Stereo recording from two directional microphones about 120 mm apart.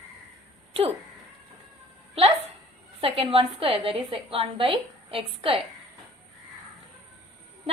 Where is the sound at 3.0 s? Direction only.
55° right (ahead or behind).